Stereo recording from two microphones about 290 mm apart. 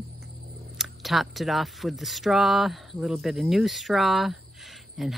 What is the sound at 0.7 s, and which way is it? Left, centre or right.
Speech, centre.